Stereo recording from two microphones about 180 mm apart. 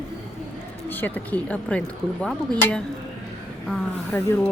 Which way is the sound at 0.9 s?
10° left (ahead or behind).